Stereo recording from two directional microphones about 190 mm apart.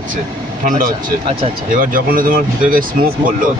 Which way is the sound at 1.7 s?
45° right (ahead or behind).